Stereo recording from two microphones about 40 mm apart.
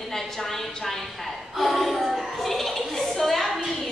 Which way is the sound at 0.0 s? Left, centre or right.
Centre.